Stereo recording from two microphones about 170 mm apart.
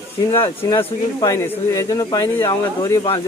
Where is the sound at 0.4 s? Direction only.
15° left (ahead or behind).